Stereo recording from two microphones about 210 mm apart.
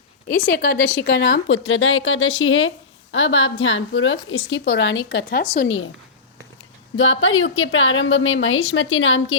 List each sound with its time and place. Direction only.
0.3 s a woman's voice: 40° left (ahead or behind); by 4.4 s 65° left (ahead or behind)
4.4 s speech: 55° left (ahead or behind)
6.9 s a woman's voice: 65° left (ahead or behind)